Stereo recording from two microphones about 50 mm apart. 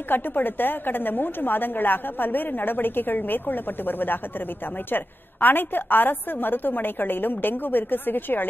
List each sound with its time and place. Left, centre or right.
0.1 s a woman's voice: left